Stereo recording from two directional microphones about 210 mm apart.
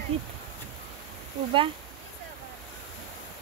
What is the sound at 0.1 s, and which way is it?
Speech, 30° right (ahead or behind).